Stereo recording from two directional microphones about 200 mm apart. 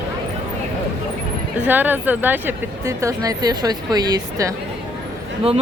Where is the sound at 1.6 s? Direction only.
10° right (ahead or behind).